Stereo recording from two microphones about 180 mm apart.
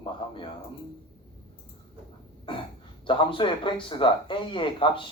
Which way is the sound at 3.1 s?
30° left (ahead or behind).